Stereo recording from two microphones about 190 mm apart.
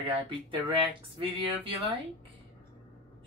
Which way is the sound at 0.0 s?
30° right (ahead or behind).